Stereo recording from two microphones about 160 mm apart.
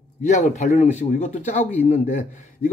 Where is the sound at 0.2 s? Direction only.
50° left (ahead or behind).